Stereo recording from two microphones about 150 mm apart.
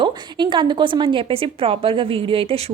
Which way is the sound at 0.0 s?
30° right (ahead or behind).